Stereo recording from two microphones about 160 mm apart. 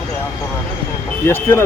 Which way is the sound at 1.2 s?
15° left (ahead or behind).